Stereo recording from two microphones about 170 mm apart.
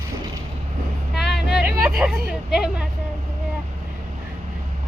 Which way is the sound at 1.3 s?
5° right (ahead or behind).